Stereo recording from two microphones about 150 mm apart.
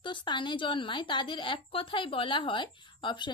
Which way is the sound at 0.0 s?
30° left (ahead or behind).